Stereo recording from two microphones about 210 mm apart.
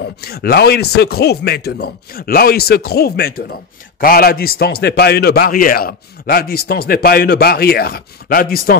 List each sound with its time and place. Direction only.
0.0 s a man's voice: 50° left (ahead or behind)